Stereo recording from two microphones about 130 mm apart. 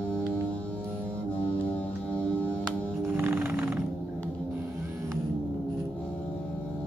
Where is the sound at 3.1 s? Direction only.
15° right (ahead or behind).